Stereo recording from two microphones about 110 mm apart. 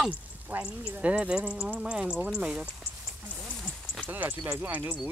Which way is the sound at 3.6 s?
5° left (ahead or behind).